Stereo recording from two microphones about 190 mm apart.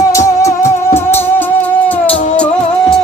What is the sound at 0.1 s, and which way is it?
Music, 15° left (ahead or behind).